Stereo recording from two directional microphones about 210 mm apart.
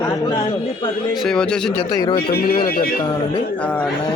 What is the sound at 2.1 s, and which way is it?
Speech, 45° left (ahead or behind).